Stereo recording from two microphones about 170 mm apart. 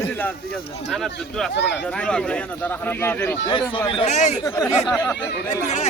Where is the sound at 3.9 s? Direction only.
40° left (ahead or behind).